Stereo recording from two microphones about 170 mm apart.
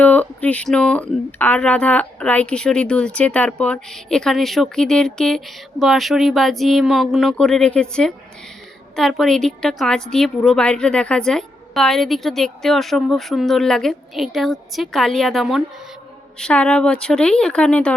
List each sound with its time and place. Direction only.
0.0 s a woman's voice: 10° left (ahead or behind)